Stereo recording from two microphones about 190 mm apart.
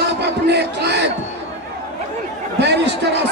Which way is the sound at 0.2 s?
60° right (ahead or behind).